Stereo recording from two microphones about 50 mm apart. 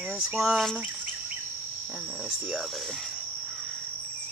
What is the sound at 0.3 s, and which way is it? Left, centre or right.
Speech, centre.